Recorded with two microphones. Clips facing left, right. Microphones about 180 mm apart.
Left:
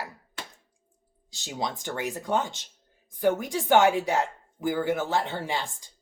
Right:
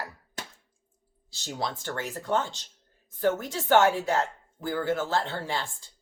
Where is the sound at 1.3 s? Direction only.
15° left (ahead or behind).